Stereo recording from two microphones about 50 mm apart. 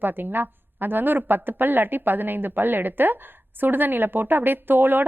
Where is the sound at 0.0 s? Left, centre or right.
Right.